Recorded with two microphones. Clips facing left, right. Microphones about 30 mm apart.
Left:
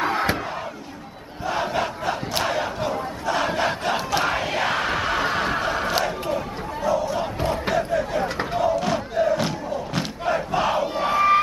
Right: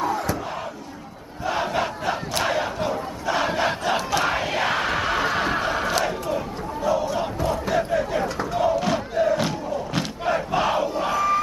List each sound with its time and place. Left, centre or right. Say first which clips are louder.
0.0 s crowd: left 2 dB; left
1.4 s crowd: even; centre
6.3 s a sound: even; centre
7.3 s crowd: even; left
7.7 s crowd: right 1 dB; centre